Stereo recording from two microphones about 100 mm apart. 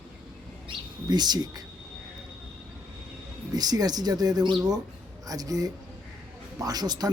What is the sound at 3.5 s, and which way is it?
Speech, 40° right (ahead or behind).